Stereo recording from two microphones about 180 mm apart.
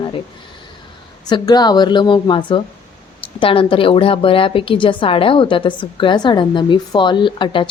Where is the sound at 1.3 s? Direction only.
20° left (ahead or behind).